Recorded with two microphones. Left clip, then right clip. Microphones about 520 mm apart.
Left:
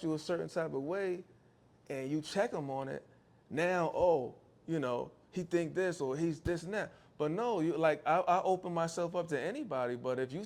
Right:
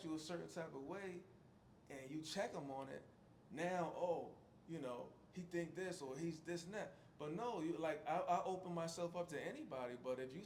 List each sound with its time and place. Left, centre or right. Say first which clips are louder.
0.0 s speech: left 13 dB; left
3.5 s speech: left 11 dB; left